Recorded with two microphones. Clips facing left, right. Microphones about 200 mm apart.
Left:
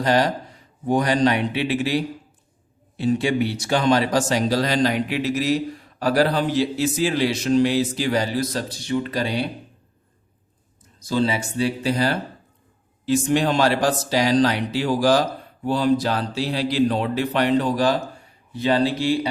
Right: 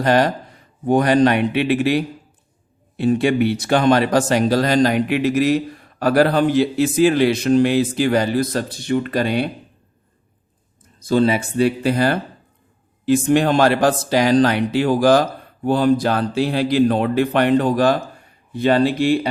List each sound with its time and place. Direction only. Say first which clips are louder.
0.0 s speech: right 3 dB; 55° right (ahead or behind)
3.0 s speech: right 4 dB; 60° right (ahead or behind)
11.0 s speech: right 5 dB; 55° right (ahead or behind)